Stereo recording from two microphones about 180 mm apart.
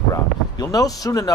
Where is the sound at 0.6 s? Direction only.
20° left (ahead or behind).